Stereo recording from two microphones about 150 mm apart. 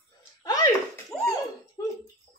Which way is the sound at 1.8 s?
25° left (ahead or behind).